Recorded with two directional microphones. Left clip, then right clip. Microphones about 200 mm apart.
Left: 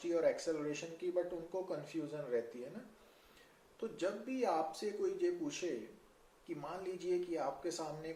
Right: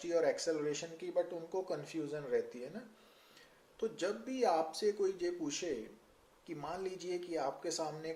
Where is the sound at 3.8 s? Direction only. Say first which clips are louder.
Right 2 dB; 40° right (ahead or behind).